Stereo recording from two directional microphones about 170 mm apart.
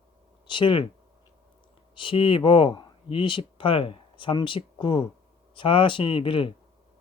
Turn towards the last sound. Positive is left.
turn(degrees=30)  # may be behind; listen again after turning